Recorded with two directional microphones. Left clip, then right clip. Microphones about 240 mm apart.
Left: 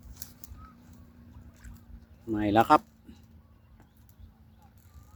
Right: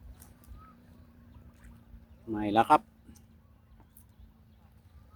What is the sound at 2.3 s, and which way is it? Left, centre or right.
Speech, centre.